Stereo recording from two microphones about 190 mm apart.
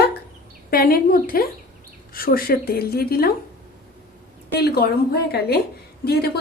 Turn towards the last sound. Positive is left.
turn(degrees=55)  # may be behind; listen again after turning